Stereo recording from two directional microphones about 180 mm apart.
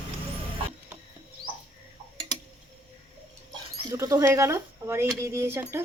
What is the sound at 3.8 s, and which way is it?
Speech, 20° right (ahead or behind).